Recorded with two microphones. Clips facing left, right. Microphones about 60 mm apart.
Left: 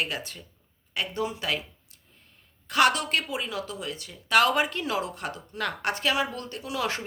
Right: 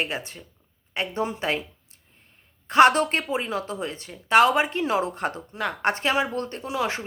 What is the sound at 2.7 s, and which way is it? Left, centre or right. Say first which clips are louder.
Speech: right 6 dB; right.